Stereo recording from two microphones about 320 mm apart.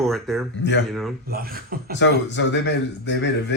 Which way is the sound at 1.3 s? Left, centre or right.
Right.